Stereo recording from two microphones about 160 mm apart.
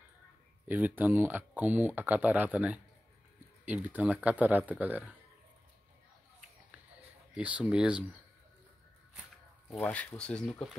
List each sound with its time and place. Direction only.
0.7 s speech: 10° right (ahead or behind)
7.3 s speech: 10° right (ahead or behind)
9.7 s speech: 5° left (ahead or behind)